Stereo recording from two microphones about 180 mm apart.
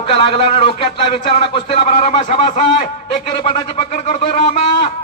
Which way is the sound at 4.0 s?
35° left (ahead or behind).